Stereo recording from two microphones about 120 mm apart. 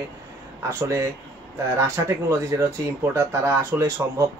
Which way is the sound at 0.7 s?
25° right (ahead or behind).